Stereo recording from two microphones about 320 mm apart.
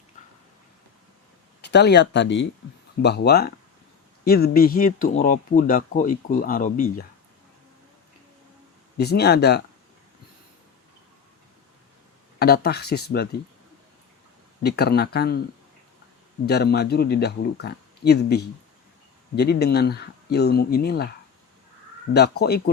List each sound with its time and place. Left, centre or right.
1.6 s speech: left
9.0 s speech: left
12.4 s speech: left
14.6 s speech: left
16.5 s speech: left
22.1 s speech: left